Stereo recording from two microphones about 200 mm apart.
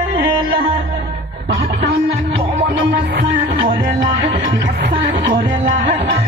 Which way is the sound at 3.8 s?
50° right (ahead or behind).